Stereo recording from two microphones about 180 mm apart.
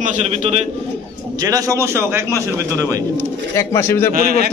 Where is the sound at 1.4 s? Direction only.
20° right (ahead or behind).